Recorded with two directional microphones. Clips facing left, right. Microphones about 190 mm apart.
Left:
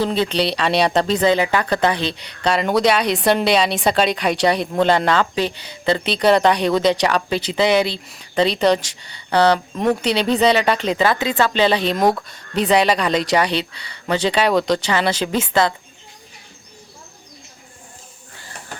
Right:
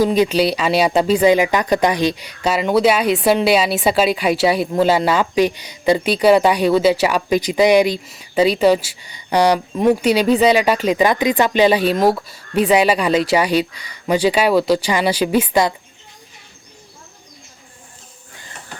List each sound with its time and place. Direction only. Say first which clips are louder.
0.0 s speech: right 4 dB; 10° right (ahead or behind)